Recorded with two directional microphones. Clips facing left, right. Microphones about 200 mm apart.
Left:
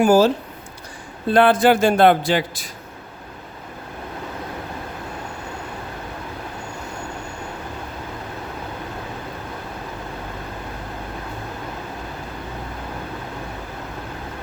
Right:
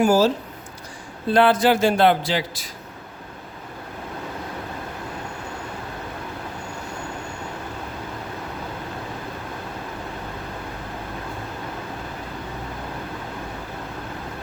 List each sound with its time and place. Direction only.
0.0 s speech: 55° left (ahead or behind)
1.3 s speech: 55° left (ahead or behind)